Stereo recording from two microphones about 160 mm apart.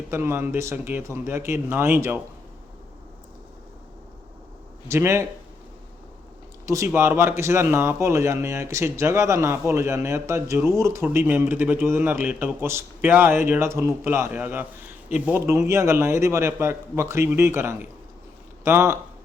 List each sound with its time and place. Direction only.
0.1 s a man's voice: 15° right (ahead or behind)
4.9 s a man's voice: 15° right (ahead or behind)
6.7 s a man's voice: 15° right (ahead or behind)